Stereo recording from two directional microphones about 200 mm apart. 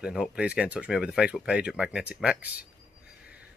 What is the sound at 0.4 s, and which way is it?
Speech, 5° right (ahead or behind).